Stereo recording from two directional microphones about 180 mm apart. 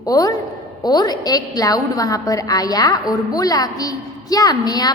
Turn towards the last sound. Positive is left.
turn(degrees=20)  # may be behind; listen again after turning